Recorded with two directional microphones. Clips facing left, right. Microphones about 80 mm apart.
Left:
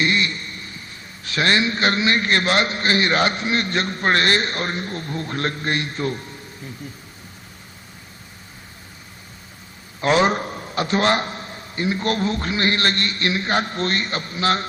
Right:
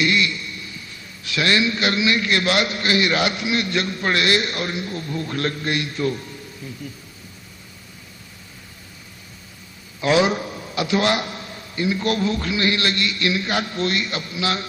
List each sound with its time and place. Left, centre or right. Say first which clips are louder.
0.0 s a man's voice: right 1 dB; left
10.0 s a man's voice: left 1 dB; left